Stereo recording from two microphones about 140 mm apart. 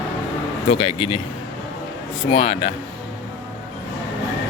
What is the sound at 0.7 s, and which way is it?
Speech, 45° left (ahead or behind).